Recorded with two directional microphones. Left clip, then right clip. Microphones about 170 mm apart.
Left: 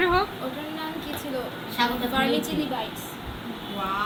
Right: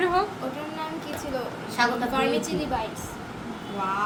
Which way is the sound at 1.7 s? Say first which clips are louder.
Right 1 dB; 70° right (ahead or behind).